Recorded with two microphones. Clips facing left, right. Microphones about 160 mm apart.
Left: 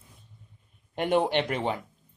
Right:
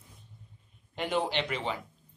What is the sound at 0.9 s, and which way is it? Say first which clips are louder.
Speech: left 6 dB; 55° left (ahead or behind).